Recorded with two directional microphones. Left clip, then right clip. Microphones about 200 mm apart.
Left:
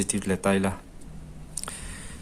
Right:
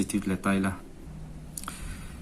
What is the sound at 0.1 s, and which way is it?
Speech, 45° left (ahead or behind).